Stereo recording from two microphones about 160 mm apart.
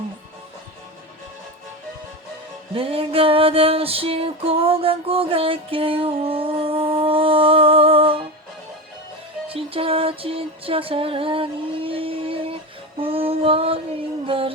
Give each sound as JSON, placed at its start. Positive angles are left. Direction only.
{"t": 2.7, "sound": "music", "side_deg": -35}
{"t": 9.5, "sound": "music", "side_deg": -35}
{"t": 13.0, "sound": "a sound", "side_deg": -35}
{"t": 14.3, "sound": "music", "side_deg": -35}